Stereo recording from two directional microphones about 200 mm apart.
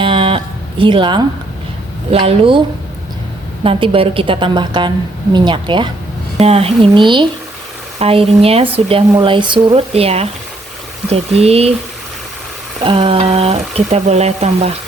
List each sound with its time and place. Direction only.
0.0 s music: 25° right (ahead or behind)
2.0 s a woman's voice: 30° right (ahead or behind)
12.8 s speech: 25° right (ahead or behind)